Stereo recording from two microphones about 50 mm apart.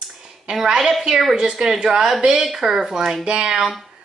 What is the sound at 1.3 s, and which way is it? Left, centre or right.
A woman's voice, centre.